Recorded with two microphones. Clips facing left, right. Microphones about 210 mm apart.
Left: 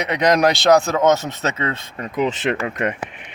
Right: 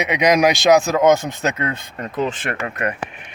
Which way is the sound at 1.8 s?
Centre (ahead or behind).